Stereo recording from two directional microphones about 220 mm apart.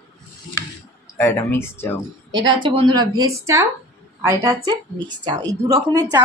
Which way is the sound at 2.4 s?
20° right (ahead or behind).